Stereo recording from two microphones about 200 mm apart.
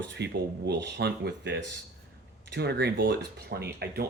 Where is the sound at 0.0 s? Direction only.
60° right (ahead or behind).